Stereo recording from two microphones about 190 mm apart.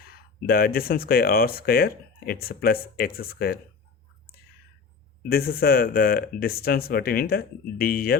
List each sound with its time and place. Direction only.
0.0 s speech: 50° left (ahead or behind)
5.2 s speech: 55° left (ahead or behind)